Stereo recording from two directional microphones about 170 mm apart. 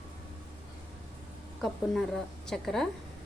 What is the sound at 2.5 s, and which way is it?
Speech, centre (ahead or behind).